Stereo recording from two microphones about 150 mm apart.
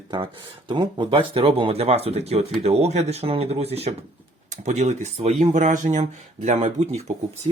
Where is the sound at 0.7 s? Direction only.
35° right (ahead or behind).